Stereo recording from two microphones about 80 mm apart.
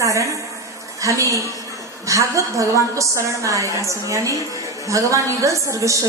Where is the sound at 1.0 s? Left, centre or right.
Right.